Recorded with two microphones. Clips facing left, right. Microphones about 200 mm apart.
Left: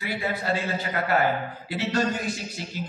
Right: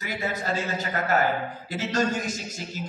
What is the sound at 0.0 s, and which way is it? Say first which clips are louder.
A man's voice: left 1 dB; 40° right (ahead or behind).